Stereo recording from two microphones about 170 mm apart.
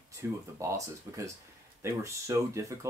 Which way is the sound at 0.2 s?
15° right (ahead or behind).